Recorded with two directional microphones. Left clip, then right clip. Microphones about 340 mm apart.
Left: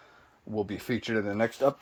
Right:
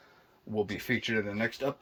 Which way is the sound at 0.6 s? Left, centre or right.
Centre.